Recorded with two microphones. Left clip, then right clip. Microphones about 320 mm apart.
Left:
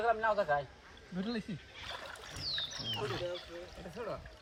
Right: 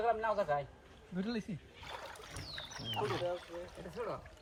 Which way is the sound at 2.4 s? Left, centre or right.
Centre.